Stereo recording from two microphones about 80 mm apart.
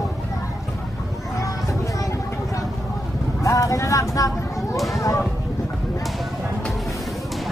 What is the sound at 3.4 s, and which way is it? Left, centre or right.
Vehicle, left.